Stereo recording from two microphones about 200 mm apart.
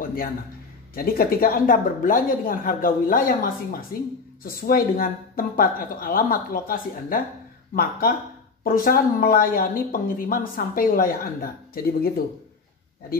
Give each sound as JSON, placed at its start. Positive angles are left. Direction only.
{"t": 0.0, "sound": "a sound", "side_deg": 45}
{"t": 0.9, "sound": "speech", "side_deg": 45}
{"t": 8.6, "sound": "speech", "side_deg": 45}